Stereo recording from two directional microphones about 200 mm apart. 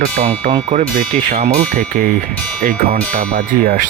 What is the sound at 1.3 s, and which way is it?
Speech, 30° right (ahead or behind).